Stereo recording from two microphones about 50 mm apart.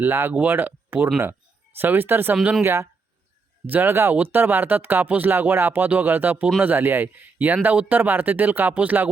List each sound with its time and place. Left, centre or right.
0.0 s speech: right
3.7 s speech: right
8.7 s speech: right